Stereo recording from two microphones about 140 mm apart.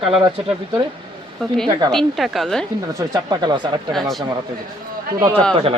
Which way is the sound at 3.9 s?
Centre (ahead or behind).